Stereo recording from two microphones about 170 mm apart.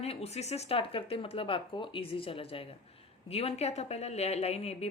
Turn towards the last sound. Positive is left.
turn(degrees=35)  # may be behind; listen again after turning